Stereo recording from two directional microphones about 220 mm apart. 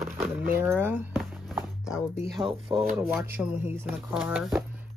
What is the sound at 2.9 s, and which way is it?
Speech, 5° right (ahead or behind).